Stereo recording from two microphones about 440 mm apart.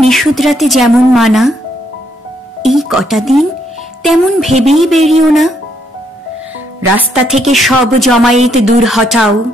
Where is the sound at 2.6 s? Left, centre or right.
Centre.